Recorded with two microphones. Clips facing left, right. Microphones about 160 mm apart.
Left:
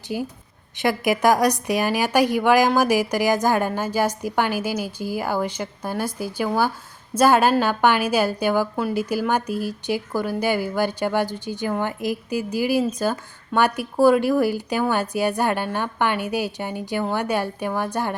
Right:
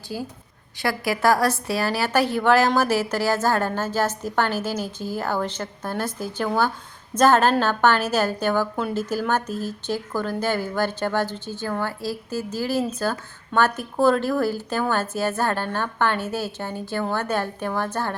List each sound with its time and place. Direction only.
0.1 s a woman's voice: 15° left (ahead or behind)